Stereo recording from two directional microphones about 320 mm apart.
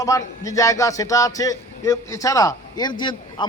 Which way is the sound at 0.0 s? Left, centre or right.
Centre.